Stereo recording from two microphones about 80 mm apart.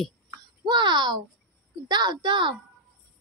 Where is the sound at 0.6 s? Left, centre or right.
Right.